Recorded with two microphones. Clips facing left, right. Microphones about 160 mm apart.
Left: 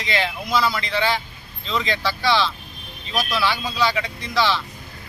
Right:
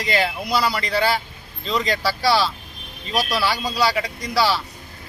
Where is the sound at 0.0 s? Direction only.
40° right (ahead or behind).